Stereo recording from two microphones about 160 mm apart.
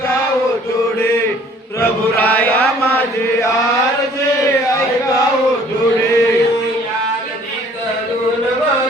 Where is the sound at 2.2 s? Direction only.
10° left (ahead or behind).